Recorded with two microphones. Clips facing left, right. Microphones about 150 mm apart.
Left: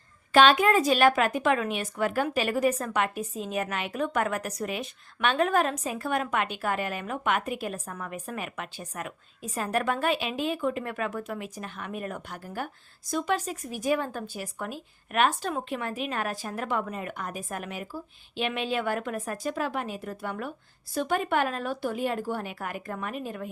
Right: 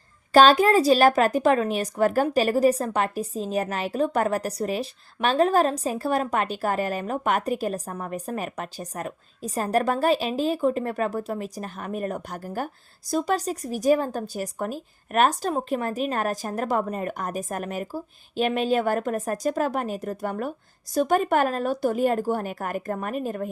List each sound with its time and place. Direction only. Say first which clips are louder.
0.3 s speech: right 4 dB; 35° right (ahead or behind)